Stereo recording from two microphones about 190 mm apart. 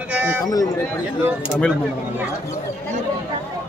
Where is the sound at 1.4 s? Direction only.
5° left (ahead or behind).